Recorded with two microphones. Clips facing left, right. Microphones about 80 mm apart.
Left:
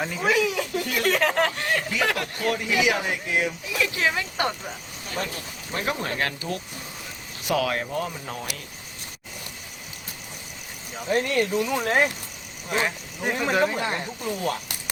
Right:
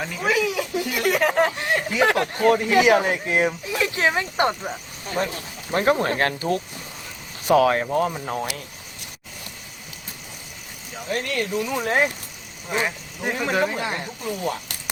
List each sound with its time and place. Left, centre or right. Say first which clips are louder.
0.0 s speech: even; centre; by 5.3 s right
5.7 s speech: right 8 dB; right
11.0 s speech: left 3 dB; centre
11.7 s speech: right 1 dB; centre